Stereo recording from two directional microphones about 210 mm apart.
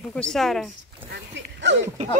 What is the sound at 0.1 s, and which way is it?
Speech, 5° left (ahead or behind).